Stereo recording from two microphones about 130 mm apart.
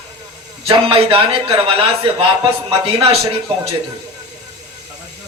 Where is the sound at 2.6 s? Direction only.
45° right (ahead or behind).